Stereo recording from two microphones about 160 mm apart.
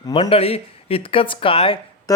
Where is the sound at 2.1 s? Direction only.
20° left (ahead or behind).